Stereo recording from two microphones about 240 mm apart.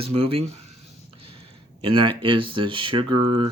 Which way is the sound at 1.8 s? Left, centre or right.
Right.